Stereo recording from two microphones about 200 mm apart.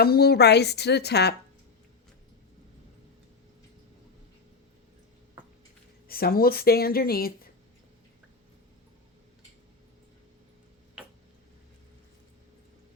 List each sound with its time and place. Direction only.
0.0 s a woman's voice: 50° left (ahead or behind)
6.1 s speech: 50° left (ahead or behind)